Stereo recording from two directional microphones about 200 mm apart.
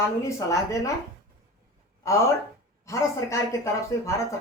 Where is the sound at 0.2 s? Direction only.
15° left (ahead or behind).